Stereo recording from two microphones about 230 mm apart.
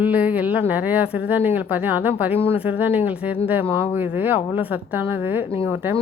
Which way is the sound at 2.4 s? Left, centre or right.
Left.